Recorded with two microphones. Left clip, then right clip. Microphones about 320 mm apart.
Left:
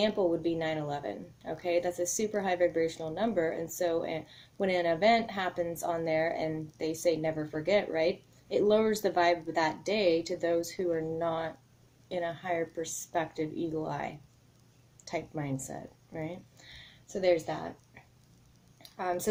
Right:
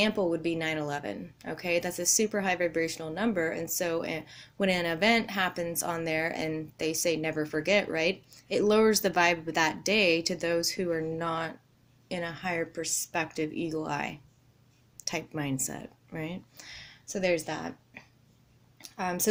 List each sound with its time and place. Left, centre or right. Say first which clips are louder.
0.0 s speech: right 1 dB; right
15.1 s speech: right 1 dB; right
18.9 s speech: right 1 dB; right